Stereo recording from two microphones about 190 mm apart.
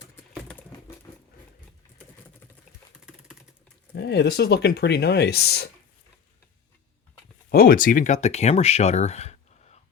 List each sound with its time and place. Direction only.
3.9 s speech: 60° left (ahead or behind)
7.5 s speech: 50° left (ahead or behind); by 9.8 s 35° left (ahead or behind)